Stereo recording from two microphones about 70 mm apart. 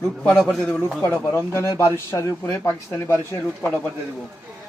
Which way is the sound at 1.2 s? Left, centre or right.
Left.